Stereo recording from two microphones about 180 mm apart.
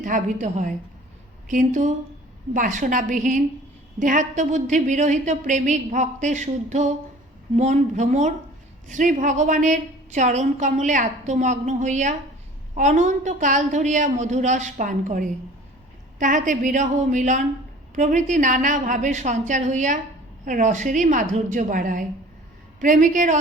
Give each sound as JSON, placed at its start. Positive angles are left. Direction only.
{"t": 0.0, "sound": "a woman's voice", "side_deg": -45}